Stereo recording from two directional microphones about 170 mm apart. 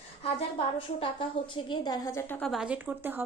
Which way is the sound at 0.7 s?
30° left (ahead or behind).